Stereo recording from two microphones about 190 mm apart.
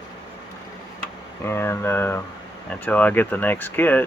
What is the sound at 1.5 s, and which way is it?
Speech, 15° left (ahead or behind).